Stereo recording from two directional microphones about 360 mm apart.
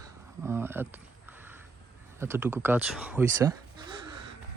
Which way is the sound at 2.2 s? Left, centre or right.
Centre.